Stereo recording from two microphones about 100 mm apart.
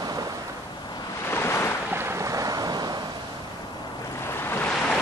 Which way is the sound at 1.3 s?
25° left (ahead or behind).